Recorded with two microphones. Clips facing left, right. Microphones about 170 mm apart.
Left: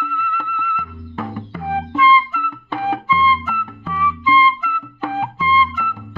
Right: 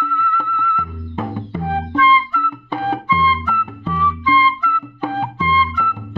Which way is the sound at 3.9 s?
5° left (ahead or behind).